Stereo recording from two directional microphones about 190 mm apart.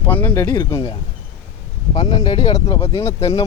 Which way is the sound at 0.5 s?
20° left (ahead or behind).